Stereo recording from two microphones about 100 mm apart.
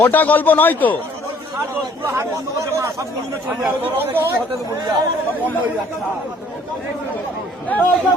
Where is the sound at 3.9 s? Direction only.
20° right (ahead or behind).